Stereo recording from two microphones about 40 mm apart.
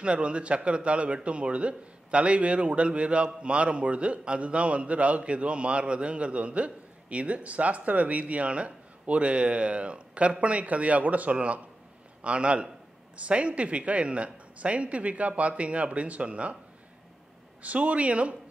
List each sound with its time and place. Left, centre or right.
0.0 s a man's voice: right
17.6 s a man's voice: right